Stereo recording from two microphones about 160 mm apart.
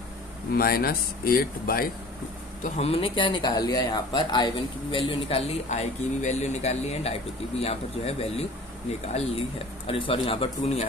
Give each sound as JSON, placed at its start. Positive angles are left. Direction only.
{"t": 0.6, "sound": "speech", "side_deg": 70}
{"t": 2.6, "sound": "a man's voice", "side_deg": 40}